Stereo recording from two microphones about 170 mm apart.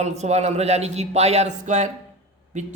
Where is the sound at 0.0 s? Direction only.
40° right (ahead or behind).